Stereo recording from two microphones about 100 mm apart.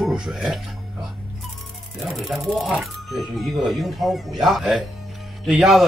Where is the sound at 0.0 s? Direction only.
5° right (ahead or behind).